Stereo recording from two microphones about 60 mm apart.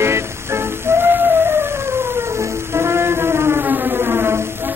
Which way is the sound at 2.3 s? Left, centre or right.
Right.